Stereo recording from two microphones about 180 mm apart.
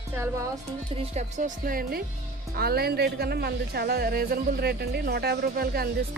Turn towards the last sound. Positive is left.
turn(degrees=-60)  # may be behind; listen again after turning